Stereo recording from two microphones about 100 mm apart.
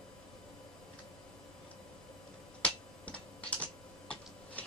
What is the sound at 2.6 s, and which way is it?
Typing, 15° left (ahead or behind).